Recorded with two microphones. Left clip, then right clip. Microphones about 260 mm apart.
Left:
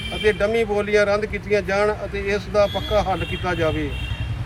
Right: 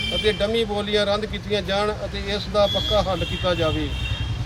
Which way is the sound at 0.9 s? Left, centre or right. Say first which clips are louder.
Left 3 dB; centre.